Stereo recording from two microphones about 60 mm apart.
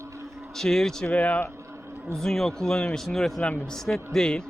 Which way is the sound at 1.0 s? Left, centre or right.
Left.